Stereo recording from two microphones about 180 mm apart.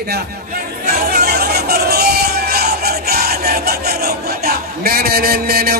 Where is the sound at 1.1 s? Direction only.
60° right (ahead or behind).